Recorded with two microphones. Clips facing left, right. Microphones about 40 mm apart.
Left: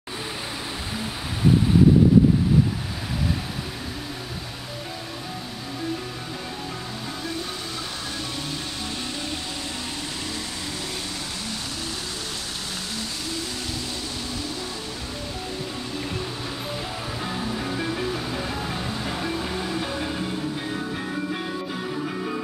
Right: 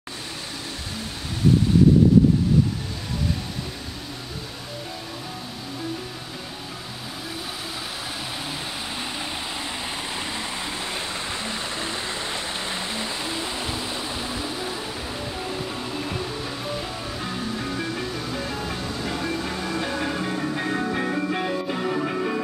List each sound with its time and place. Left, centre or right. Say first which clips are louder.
12.9 s vehicle: right 3 dB; right
16.2 s music: right 1 dB; centre
19.7 s music: right 2 dB; centre